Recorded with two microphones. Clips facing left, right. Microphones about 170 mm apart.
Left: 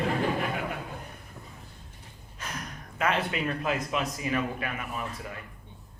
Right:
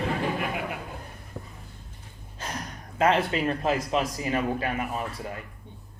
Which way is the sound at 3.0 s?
30° right (ahead or behind).